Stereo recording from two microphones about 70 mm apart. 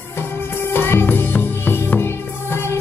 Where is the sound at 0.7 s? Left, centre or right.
Left.